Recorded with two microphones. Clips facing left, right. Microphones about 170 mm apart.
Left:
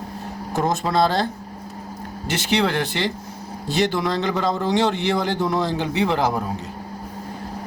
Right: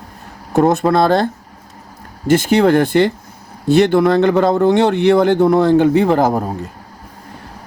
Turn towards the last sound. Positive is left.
turn(degrees=-45)  # may be behind; listen again after turning